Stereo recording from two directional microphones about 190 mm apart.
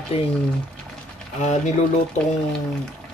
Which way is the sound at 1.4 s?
40° left (ahead or behind).